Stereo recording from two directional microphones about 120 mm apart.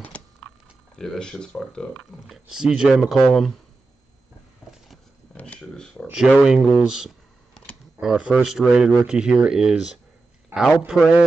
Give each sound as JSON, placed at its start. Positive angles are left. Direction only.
{"t": 0.1, "sound": "a sound", "side_deg": 10}
{"t": 0.9, "sound": "speech", "side_deg": 5}
{"t": 2.3, "sound": "speech", "side_deg": -5}
{"t": 5.3, "sound": "speech", "side_deg": 10}
{"t": 6.1, "sound": "speech", "side_deg": -5}
{"t": 10.5, "sound": "speech", "side_deg": -20}
{"t": 10.9, "sound": "speech", "side_deg": -5}